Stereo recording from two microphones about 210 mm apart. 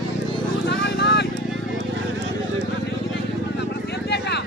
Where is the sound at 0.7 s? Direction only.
55° left (ahead or behind).